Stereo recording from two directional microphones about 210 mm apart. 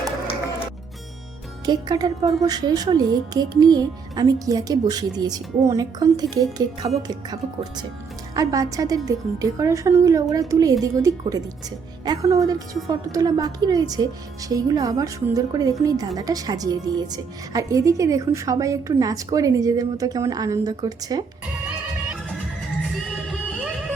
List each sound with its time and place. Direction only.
1.6 s a woman's voice: 20° right (ahead or behind)